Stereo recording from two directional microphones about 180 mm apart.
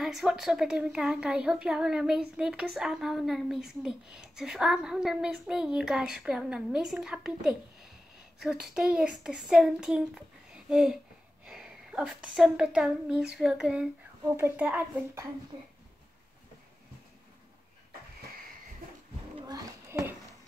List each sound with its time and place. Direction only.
0.0 s a woman's voice: 5° right (ahead or behind)
15.5 s speech: 25° right (ahead or behind)
19.4 s children playing: 20° right (ahead or behind)